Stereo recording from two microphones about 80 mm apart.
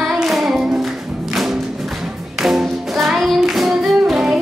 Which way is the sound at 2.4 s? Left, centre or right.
Centre.